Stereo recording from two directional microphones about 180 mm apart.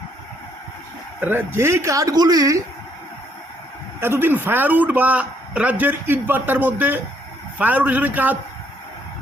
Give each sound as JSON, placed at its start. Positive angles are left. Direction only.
{"t": 1.2, "sound": "a man's voice", "side_deg": -15}
{"t": 4.0, "sound": "a man's voice", "side_deg": -10}